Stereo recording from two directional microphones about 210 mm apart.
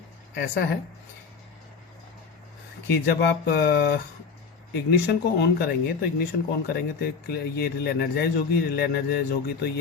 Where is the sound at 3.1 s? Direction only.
50° left (ahead or behind).